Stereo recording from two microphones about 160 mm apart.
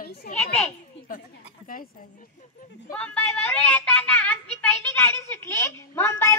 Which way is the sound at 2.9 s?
10° left (ahead or behind).